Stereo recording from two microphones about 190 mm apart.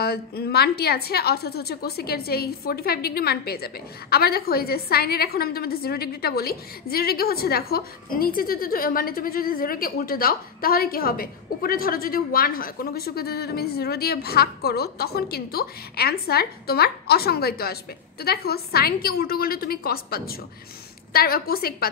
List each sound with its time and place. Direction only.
0.0 s a woman's voice: 55° left (ahead or behind)